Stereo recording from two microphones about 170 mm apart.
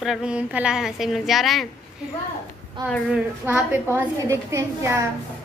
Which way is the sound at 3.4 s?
10° right (ahead or behind).